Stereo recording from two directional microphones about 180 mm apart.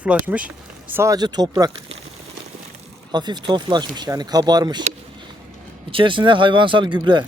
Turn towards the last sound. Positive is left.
turn(degrees=-25)  # may be behind; listen again after turning